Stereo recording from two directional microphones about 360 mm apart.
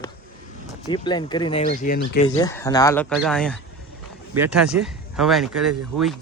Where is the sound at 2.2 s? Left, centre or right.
Centre.